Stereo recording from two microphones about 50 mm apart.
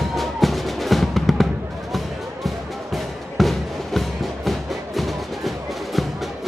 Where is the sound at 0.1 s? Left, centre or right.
Centre.